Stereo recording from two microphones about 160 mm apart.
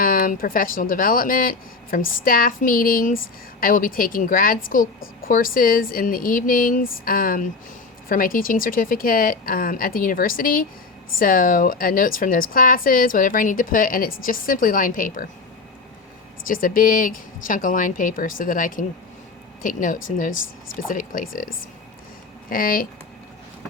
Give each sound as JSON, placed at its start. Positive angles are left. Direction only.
{"t": 0.0, "sound": "a woman's voice", "side_deg": 60}
{"t": 16.5, "sound": "a woman's voice", "side_deg": 60}